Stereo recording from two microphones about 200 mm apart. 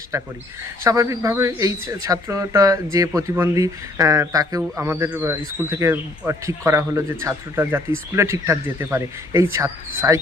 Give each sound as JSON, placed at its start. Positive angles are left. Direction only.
{"t": 0.1, "sound": "a man's voice", "side_deg": -15}